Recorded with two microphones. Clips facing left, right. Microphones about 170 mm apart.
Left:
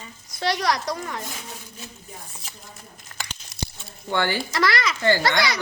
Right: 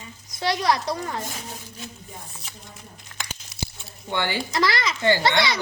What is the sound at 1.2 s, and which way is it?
Speech, 40° right (ahead or behind).